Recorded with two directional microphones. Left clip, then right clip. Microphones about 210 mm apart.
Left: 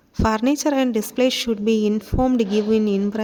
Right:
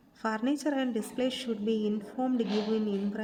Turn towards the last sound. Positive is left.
turn(degrees=40)  # may be behind; listen again after turning